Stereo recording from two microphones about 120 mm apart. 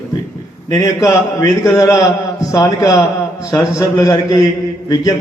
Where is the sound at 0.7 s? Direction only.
25° left (ahead or behind).